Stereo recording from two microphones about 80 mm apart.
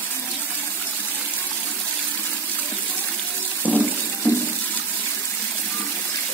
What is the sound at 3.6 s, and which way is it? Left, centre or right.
Water, centre.